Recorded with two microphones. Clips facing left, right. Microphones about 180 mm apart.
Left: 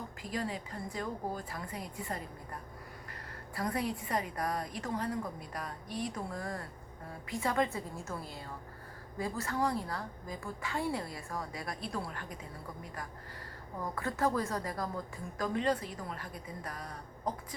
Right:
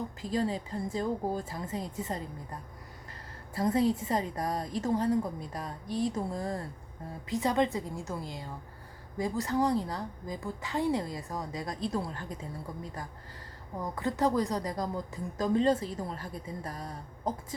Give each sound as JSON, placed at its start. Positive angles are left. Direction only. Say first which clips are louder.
{"t": 0.2, "sound": "a woman's voice", "louder": "right 6 dB", "side_deg": -25}
{"t": 13.9, "sound": "a woman's voice", "louder": "right 4 dB", "side_deg": -20}